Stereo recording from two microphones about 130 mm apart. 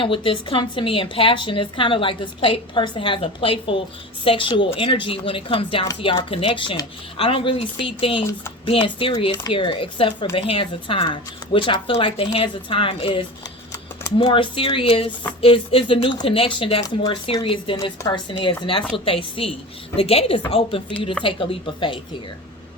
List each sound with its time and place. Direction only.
0.0 s a woman's voice: 40° left (ahead or behind)